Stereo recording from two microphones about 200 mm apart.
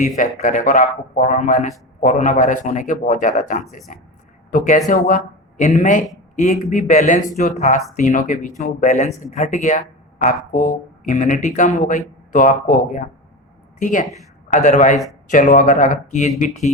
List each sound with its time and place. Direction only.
0.2 s a woman's voice: 40° left (ahead or behind)